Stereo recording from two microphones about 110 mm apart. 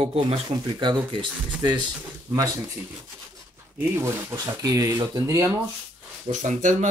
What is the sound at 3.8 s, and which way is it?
Speech, 25° right (ahead or behind).